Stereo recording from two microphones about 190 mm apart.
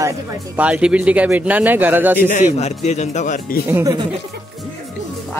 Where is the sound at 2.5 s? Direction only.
35° left (ahead or behind).